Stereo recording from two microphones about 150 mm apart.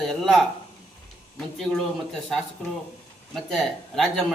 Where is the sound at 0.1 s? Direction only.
Centre (ahead or behind).